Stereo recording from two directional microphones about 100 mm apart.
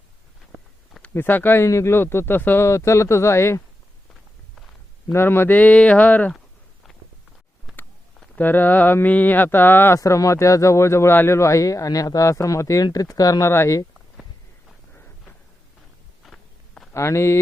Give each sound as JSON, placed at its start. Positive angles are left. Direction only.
{"t": 1.1, "sound": "speech", "side_deg": 20}
{"t": 5.1, "sound": "speech", "side_deg": 25}
{"t": 8.4, "sound": "speech", "side_deg": 20}
{"t": 10.0, "sound": "speech", "side_deg": 30}
{"t": 16.2, "sound": "walk", "side_deg": 5}
{"t": 16.9, "sound": "speech", "side_deg": 30}